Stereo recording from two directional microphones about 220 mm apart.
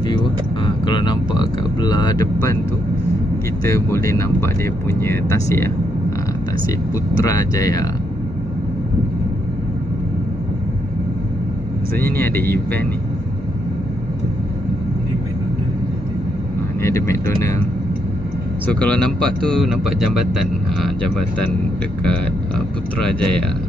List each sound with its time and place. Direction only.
0.1 s speech: 20° left (ahead or behind)
3.6 s speech: 15° left (ahead or behind)
7.2 s speech: 15° left (ahead or behind)
12.0 s speech: 10° left (ahead or behind)
16.8 s speech: 15° left (ahead or behind)
18.7 s speech: 5° left (ahead or behind)
22.9 s speech: 5° left (ahead or behind)